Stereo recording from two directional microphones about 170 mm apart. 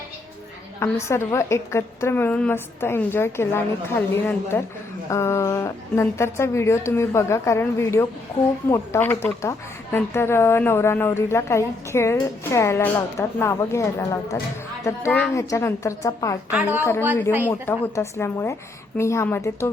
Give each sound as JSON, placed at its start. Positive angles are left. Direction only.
{"t": 0.8, "sound": "a woman's voice", "side_deg": 15}
{"t": 16.5, "sound": "a woman's voice", "side_deg": -10}
{"t": 17.5, "sound": "a woman's voice", "side_deg": 15}